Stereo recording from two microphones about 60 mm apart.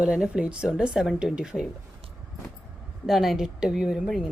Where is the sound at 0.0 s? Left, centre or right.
Centre.